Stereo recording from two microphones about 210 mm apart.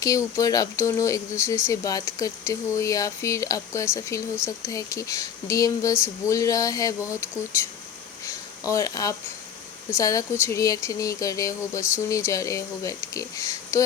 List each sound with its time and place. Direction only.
0.0 s speech: 15° left (ahead or behind)
8.7 s speech: 15° left (ahead or behind)